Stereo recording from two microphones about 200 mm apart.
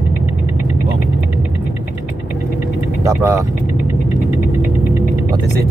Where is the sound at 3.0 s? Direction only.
15° right (ahead or behind).